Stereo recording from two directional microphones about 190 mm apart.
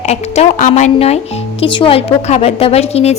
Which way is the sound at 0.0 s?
35° left (ahead or behind).